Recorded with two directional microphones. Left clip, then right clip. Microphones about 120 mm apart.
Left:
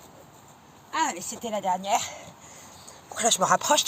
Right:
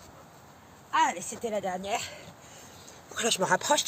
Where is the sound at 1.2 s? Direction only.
20° right (ahead or behind); by 2.2 s 45° right (ahead or behind).